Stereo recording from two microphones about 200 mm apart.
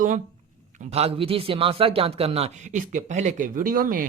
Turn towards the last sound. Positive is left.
turn(degrees=-45)  # may be behind; listen again after turning